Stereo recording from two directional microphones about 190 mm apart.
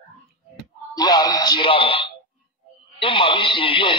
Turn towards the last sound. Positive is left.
turn(degrees=30)  # may be behind; listen again after turning